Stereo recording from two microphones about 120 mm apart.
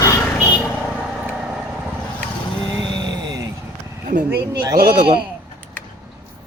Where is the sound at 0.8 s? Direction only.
Centre (ahead or behind).